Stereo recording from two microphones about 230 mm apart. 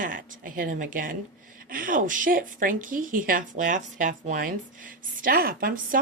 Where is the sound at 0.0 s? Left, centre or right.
Right.